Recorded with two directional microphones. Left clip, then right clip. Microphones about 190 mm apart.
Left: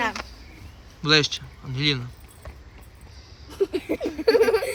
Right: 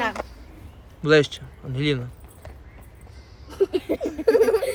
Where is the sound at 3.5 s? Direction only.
Centre (ahead or behind).